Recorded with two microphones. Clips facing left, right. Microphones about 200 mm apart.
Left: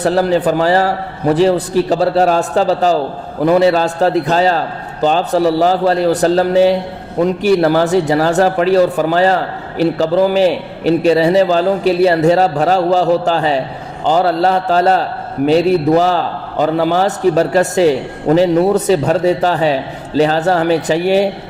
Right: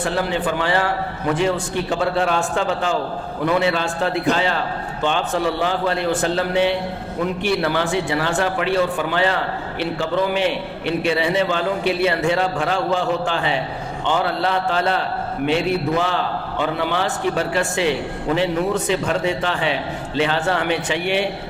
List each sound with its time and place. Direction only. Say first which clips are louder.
0.0 s a man's voice: left 9 dB; 40° left (ahead or behind)